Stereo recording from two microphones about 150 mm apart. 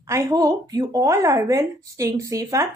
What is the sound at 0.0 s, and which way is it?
A woman's voice, 20° right (ahead or behind).